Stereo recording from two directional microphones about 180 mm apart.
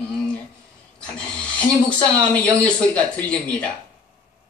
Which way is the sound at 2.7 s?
5° left (ahead or behind).